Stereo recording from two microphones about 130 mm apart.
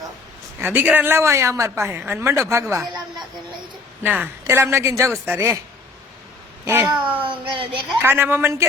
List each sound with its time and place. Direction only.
0.6 s speech: 15° right (ahead or behind)
4.0 s speech: 15° right (ahead or behind)
6.7 s speech: 15° right (ahead or behind)
7.3 s speech: 40° right (ahead or behind)
8.0 s speech: 15° right (ahead or behind)